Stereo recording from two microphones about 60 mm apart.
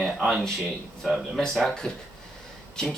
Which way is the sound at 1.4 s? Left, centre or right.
Centre.